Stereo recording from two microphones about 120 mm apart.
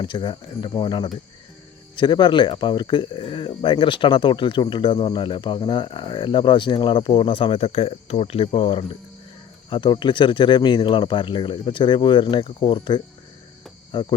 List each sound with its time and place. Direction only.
0.0 s speech: 40° left (ahead or behind)